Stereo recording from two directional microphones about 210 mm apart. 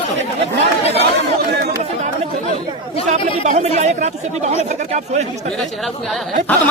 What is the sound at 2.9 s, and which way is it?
Speech, 25° left (ahead or behind).